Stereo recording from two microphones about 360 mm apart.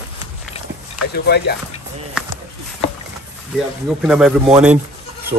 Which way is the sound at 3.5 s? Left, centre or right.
Centre.